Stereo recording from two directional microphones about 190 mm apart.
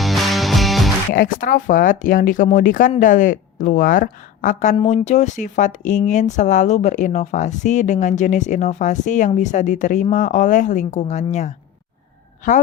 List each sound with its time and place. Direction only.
0.0 s music: centre (ahead or behind)
1.1 s a woman's voice: 45° left (ahead or behind)